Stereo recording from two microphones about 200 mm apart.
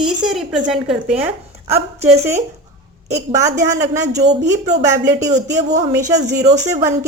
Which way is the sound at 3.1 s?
15° right (ahead or behind).